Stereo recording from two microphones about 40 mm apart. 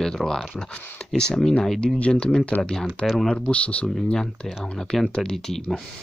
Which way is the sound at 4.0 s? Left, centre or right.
Centre.